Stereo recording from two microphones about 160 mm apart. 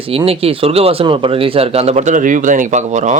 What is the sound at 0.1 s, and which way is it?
A man's voice, 35° right (ahead or behind).